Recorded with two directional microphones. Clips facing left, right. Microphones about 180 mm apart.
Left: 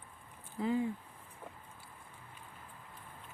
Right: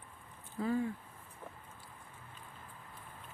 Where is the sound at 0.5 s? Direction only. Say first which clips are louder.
Left 1 dB; 15° left (ahead or behind).